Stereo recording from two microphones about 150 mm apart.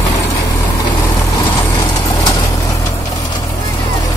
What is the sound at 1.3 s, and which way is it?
Vehicle, 30° left (ahead or behind).